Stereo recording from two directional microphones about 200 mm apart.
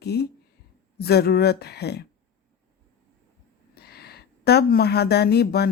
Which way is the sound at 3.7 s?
50° left (ahead or behind).